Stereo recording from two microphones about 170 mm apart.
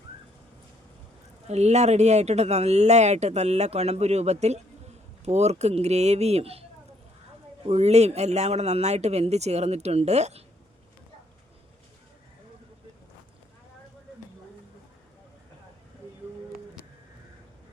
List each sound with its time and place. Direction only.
1.5 s speech: 40° right (ahead or behind)
7.7 s speech: 40° right (ahead or behind)